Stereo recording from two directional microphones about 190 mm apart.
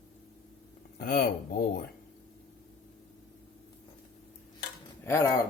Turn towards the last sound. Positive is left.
turn(degrees=15)  # may be behind; listen again after turning